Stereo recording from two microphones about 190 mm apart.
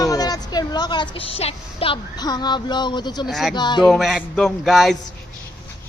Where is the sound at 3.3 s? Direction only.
Centre (ahead or behind).